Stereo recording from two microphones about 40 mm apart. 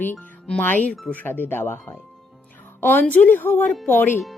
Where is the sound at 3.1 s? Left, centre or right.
Left.